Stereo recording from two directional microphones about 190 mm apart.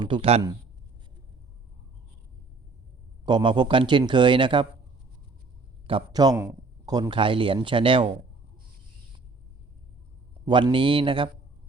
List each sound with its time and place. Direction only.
0.0 s speech: 25° right (ahead or behind)
3.2 s speech: 25° right (ahead or behind)
5.9 s speech: 20° right (ahead or behind)
10.4 s speech: 25° right (ahead or behind)